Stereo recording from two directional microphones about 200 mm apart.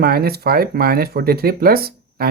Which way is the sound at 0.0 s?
50° right (ahead or behind).